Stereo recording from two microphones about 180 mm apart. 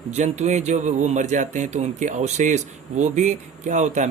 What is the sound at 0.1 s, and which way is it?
Speech, 40° right (ahead or behind).